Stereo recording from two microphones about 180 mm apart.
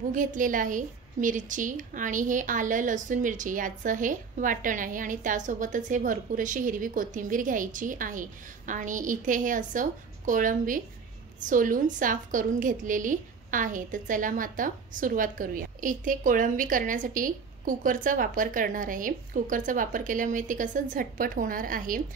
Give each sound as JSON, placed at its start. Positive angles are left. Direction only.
{"t": 0.1, "sound": "a woman's voice", "side_deg": -45}